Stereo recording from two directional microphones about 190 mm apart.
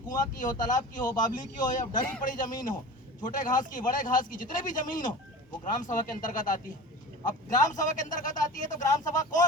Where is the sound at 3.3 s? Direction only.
45° left (ahead or behind).